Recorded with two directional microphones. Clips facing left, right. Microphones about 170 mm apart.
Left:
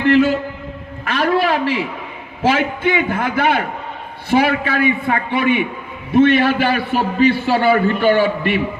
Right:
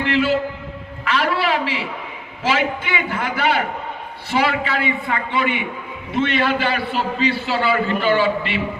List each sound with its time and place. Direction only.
0.0 s a man's voice: 50° left (ahead or behind)
1.0 s a sound: 50° left (ahead or behind)
2.4 s a man's voice: 55° left (ahead or behind)